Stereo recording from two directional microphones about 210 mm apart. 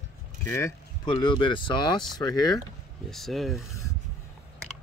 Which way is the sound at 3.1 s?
Centre (ahead or behind).